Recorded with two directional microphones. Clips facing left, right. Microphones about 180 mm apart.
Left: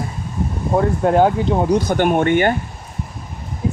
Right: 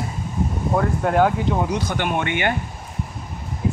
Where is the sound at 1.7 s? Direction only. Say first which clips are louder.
Left 7 dB; 45° left (ahead or behind).